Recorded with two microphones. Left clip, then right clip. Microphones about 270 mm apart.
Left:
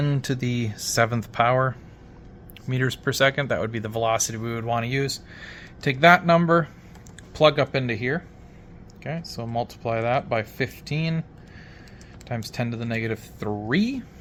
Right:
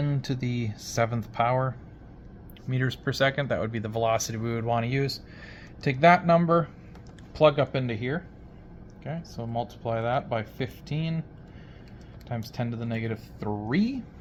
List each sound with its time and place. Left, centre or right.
0.0 s speech: left
12.3 s speech: left